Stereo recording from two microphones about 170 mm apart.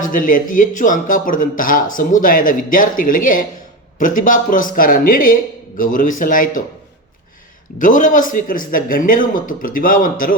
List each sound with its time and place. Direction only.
0.0 s speech: 50° left (ahead or behind)
7.8 s speech: 50° left (ahead or behind)